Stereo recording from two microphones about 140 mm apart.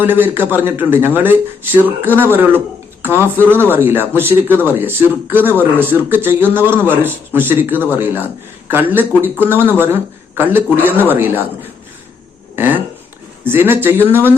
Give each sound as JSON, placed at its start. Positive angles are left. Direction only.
{"t": 0.0, "sound": "a man's voice", "side_deg": -15}
{"t": 12.5, "sound": "a man's voice", "side_deg": -15}